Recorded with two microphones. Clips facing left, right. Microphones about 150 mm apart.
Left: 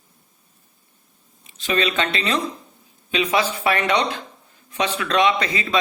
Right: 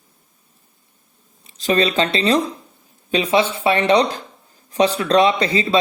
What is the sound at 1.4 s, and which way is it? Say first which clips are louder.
A man's voice: right 4 dB; 35° right (ahead or behind).